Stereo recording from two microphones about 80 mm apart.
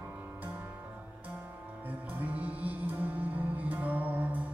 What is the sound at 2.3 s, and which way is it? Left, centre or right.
Music, centre.